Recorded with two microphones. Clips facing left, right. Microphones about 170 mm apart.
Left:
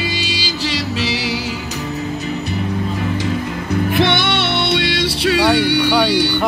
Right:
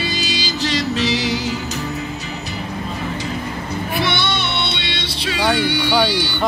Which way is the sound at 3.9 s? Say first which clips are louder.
Left 3 dB; 90° left.